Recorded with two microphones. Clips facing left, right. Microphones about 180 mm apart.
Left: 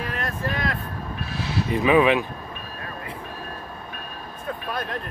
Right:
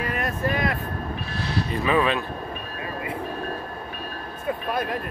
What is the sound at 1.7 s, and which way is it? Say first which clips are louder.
Speech: left 5 dB; 15° left (ahead or behind).